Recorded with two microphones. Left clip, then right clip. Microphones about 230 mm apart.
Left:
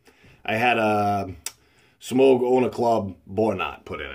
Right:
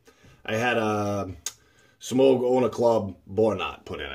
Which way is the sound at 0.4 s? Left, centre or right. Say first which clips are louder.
Left 4 dB; left.